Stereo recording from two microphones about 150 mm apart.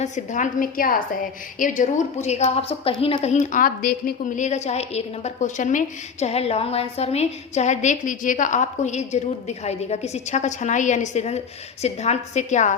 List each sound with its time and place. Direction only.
0.0 s a woman's voice: 55° left (ahead or behind); by 4.1 s 80° left
4.4 s a woman's voice: 50° left (ahead or behind)